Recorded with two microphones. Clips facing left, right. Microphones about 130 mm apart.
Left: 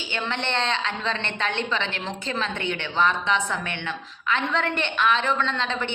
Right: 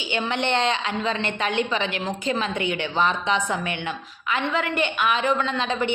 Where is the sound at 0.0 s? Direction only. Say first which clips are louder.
Right 4 dB; 15° right (ahead or behind).